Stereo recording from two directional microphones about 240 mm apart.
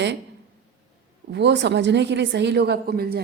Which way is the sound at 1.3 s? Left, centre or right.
Right.